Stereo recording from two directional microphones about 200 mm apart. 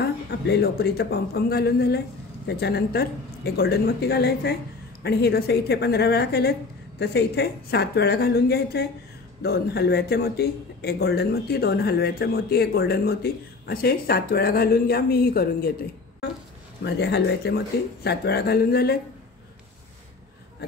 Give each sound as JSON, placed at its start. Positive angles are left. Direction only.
{"t": 0.0, "sound": "a man's voice", "side_deg": 55}
{"t": 16.8, "sound": "a man's voice", "side_deg": 55}